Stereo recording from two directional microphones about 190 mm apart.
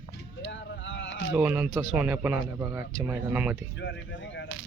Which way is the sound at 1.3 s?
10° right (ahead or behind).